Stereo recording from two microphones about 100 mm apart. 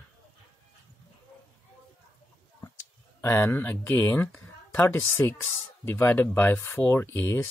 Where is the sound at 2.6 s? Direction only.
25° left (ahead or behind).